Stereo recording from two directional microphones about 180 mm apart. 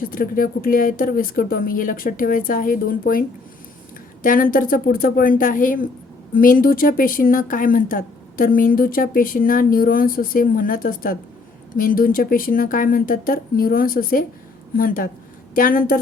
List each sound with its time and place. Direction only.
0.1 s speech: 50° left (ahead or behind)